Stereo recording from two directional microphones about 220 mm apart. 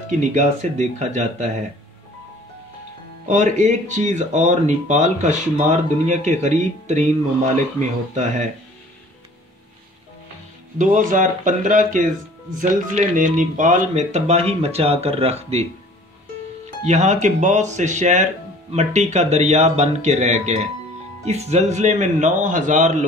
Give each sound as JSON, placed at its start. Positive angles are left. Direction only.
{"t": 0.2, "sound": "speech", "side_deg": -30}
{"t": 3.3, "sound": "speech", "side_deg": -35}
{"t": 10.8, "sound": "speech", "side_deg": -35}
{"t": 16.8, "sound": "speech", "side_deg": -30}